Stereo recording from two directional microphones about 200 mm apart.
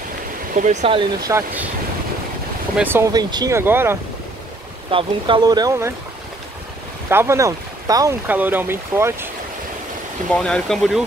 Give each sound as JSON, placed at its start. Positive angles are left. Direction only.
{"t": 0.6, "sound": "speech", "side_deg": -35}
{"t": 2.8, "sound": "speech", "side_deg": -10}
{"t": 4.9, "sound": "speech", "side_deg": -25}
{"t": 7.1, "sound": "speech", "side_deg": -15}
{"t": 10.3, "sound": "speech", "side_deg": 5}